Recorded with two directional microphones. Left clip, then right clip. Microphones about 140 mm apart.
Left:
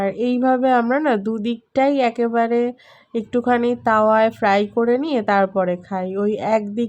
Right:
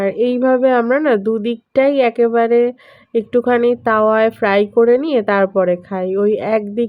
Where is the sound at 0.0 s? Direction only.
20° right (ahead or behind).